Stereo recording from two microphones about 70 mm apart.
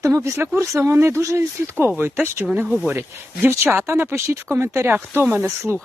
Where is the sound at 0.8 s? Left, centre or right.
Right.